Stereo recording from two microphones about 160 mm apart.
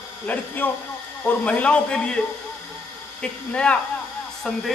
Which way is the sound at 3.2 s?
5° left (ahead or behind).